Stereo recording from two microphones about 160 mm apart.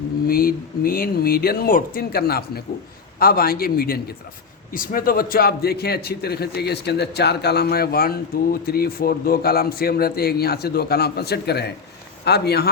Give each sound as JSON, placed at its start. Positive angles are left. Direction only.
{"t": 0.3, "sound": "a man's voice", "side_deg": 65}